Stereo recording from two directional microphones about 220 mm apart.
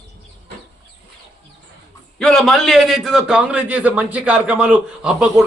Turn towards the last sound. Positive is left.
turn(degrees=-5)  # may be behind; listen again after turning